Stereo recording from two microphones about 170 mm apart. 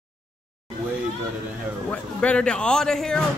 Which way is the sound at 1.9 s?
5° left (ahead or behind).